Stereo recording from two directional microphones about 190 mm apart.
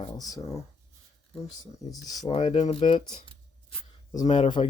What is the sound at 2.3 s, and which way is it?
Speech, 35° left (ahead or behind).